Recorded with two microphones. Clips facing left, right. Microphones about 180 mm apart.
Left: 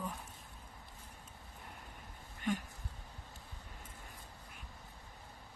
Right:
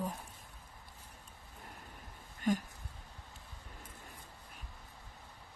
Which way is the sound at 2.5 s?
40° right (ahead or behind).